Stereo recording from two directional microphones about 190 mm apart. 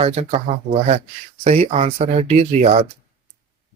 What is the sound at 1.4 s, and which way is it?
Speech, 35° right (ahead or behind).